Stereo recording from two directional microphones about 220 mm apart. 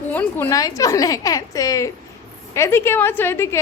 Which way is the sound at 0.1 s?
10° left (ahead or behind).